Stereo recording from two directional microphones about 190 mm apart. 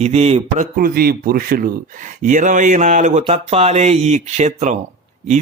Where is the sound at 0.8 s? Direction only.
50° right (ahead or behind).